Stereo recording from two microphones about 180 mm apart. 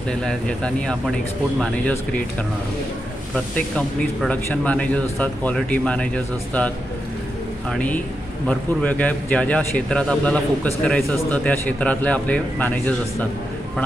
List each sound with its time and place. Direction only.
0.1 s speech: 5° left (ahead or behind)
3.3 s speech: 5° left (ahead or behind)
7.7 s speech: 10° left (ahead or behind)